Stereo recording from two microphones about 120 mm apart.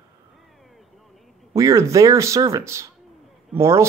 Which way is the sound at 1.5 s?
25° right (ahead or behind).